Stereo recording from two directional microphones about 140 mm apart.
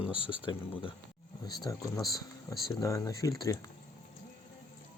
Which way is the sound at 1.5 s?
25° left (ahead or behind).